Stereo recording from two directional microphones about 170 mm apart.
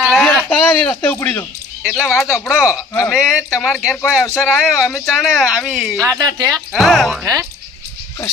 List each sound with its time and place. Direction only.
0.0 s a sound: centre (ahead or behind)
1.8 s speech: centre (ahead or behind)
2.0 s speech: 15° left (ahead or behind)
2.3 s speech: centre (ahead or behind)
6.1 s speech: 20° right (ahead or behind)
6.7 s speech: centre (ahead or behind)